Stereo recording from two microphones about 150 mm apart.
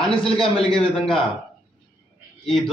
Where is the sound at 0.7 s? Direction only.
35° left (ahead or behind).